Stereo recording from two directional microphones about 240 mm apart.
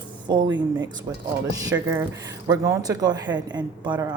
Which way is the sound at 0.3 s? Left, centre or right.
Centre.